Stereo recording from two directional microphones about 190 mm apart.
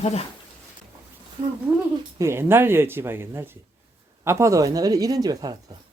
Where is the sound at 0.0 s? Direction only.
35° left (ahead or behind).